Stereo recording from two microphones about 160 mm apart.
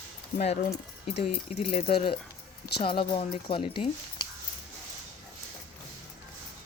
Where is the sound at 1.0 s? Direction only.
45° left (ahead or behind).